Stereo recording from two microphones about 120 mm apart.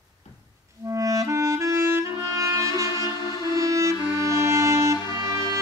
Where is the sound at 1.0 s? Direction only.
25° right (ahead or behind).